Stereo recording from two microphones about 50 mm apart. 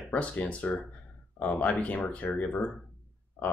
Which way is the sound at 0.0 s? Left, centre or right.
Left.